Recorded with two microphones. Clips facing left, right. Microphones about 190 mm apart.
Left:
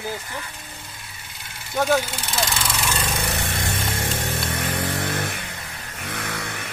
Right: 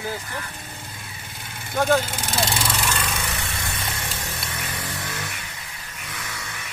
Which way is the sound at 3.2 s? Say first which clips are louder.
Left 4 dB; 50° left (ahead or behind).